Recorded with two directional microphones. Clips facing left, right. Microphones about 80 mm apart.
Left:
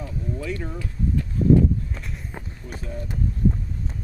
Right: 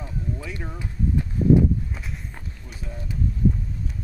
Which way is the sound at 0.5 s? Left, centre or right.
Centre.